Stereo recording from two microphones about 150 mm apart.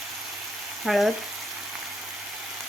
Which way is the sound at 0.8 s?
Centre (ahead or behind).